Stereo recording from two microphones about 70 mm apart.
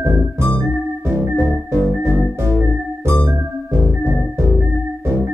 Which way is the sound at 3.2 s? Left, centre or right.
Right.